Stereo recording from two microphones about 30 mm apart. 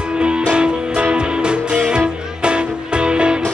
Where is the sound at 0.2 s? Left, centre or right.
Right.